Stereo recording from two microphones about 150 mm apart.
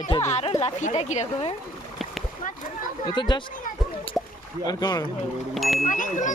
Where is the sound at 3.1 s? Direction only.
30° left (ahead or behind).